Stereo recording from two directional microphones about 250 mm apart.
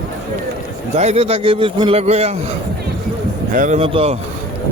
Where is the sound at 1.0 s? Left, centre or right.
Right.